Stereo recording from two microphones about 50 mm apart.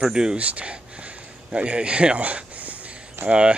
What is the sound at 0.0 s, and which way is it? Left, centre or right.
A man's voice, centre.